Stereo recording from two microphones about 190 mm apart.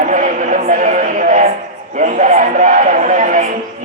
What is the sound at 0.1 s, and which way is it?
Music, 45° right (ahead or behind).